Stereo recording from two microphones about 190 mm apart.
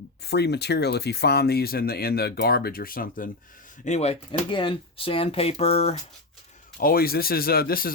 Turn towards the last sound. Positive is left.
turn(degrees=50)  # may be behind; listen again after turning